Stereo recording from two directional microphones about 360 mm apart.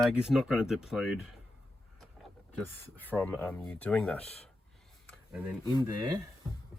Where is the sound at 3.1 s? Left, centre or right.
Centre.